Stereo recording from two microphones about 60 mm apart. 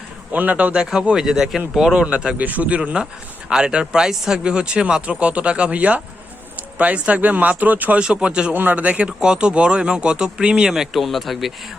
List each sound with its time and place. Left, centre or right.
0.3 s a man's voice: right
1.1 s speech: centre
2.4 s a man's voice: right
8.0 s speech: centre
8.5 s speech: right; by 11.5 s centre